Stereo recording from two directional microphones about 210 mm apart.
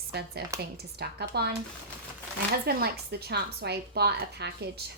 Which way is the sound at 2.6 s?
50° right (ahead or behind).